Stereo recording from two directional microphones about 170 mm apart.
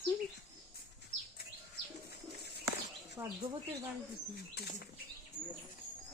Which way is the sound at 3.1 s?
15° right (ahead or behind).